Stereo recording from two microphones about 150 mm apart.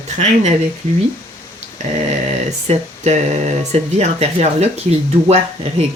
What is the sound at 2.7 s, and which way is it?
Speech, 50° right (ahead or behind).